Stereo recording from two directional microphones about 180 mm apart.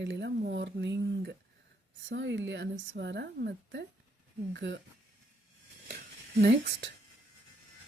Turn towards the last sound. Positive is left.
turn(degrees=-65)  # may be behind; listen again after turning